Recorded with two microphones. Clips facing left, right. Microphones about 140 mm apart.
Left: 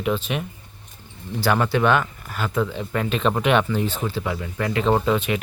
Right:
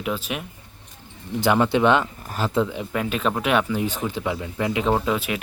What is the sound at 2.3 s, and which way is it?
Speech, 30° right (ahead or behind).